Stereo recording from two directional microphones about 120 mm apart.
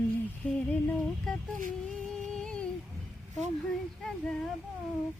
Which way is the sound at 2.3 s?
5° left (ahead or behind).